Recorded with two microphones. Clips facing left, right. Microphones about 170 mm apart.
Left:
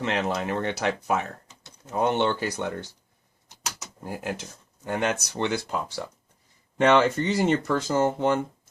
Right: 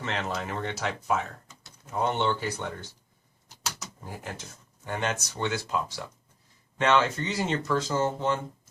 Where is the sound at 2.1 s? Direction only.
75° left (ahead or behind).